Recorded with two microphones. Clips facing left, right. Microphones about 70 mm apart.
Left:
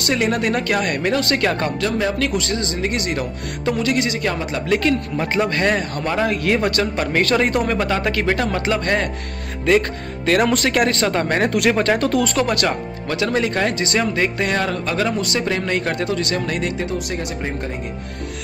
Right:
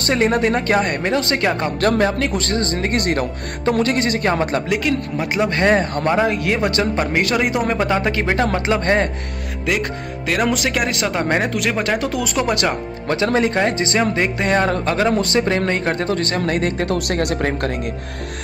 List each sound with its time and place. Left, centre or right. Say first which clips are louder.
0.0 s speech: right 3 dB; right
1.8 s speech: right 5 dB; right
2.0 s speech: right 1 dB; right
2.4 s speech: right 2 dB; right
4.6 s speech: left 1 dB; centre
5.5 s speech: right 3 dB; right
9.7 s speech: left 5 dB; centre
11.4 s speech: left 3 dB; centre
12.0 s speech: left 2 dB; centre; by 16.8 s right
16.8 s speech: right 5 dB; right